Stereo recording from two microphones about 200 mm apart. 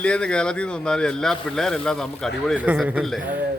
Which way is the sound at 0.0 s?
5° left (ahead or behind).